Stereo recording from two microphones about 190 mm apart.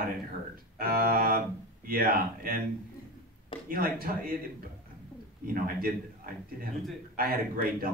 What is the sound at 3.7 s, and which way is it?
Speech, 50° right (ahead or behind).